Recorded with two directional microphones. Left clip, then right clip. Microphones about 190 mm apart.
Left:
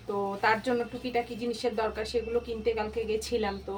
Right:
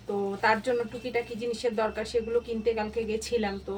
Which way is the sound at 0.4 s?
5° left (ahead or behind).